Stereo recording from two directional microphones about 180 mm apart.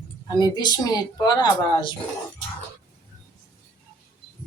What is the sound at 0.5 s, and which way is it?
A woman's voice, 25° left (ahead or behind).